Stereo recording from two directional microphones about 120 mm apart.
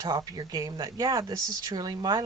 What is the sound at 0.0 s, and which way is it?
Speech, 30° right (ahead or behind).